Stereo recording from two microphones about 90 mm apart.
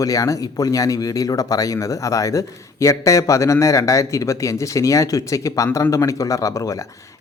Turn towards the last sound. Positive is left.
turn(degrees=40)  # may be behind; listen again after turning